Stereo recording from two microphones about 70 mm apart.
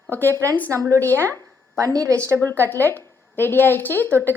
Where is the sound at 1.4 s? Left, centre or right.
Right.